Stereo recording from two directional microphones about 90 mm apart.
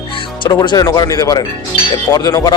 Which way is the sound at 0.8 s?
40° left (ahead or behind).